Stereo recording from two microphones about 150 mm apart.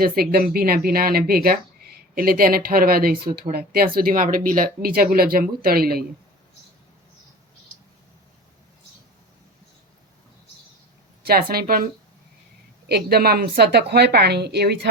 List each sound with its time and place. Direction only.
0.0 s speech: 85° right
11.2 s a woman's voice: 90° right
12.9 s a woman's voice: 90° right